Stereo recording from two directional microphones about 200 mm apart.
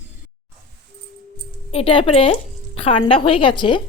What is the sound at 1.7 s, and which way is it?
Speech, 25° left (ahead or behind).